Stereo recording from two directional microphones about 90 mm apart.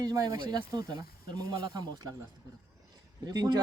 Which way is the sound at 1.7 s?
45° right (ahead or behind).